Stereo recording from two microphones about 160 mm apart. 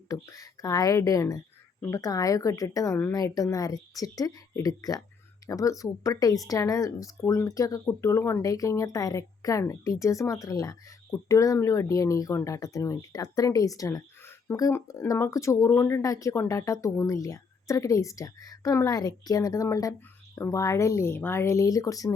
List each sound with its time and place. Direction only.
0.1 s speech: 20° left (ahead or behind)